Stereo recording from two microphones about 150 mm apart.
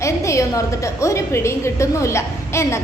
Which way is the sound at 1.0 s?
20° left (ahead or behind).